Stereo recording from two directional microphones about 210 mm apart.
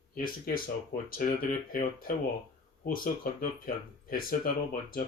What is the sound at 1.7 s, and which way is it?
Speech, 40° left (ahead or behind).